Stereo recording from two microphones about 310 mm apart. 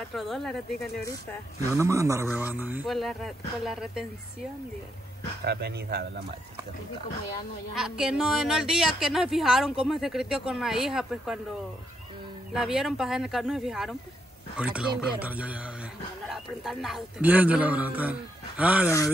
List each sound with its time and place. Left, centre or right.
0.1 s speech: centre
1.6 s speech: centre
5.4 s speech: right
7.7 s speech: centre
12.5 s speech: centre